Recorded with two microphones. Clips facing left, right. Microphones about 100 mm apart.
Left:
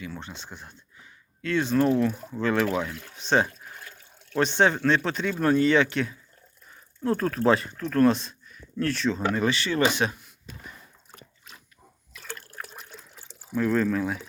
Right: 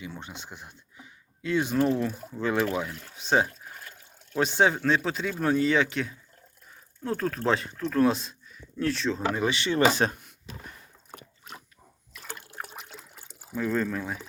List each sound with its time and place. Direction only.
0.0 s speech: 15° right (ahead or behind); by 9.4 s centre (ahead or behind)
9.4 s speech: 20° right (ahead or behind)
9.8 s speech: 40° right (ahead or behind)
11.1 s a sound: 50° right (ahead or behind)
12.3 s liquid: 15° right (ahead or behind)
13.5 s speech: centre (ahead or behind)